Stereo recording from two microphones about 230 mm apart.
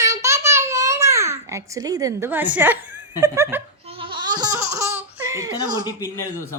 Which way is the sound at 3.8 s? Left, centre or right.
Right.